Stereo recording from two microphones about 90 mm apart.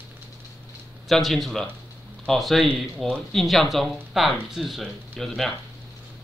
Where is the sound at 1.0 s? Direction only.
Centre (ahead or behind).